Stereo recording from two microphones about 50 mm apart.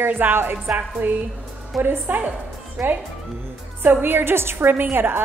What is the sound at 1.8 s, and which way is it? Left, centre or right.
A woman's voice, right.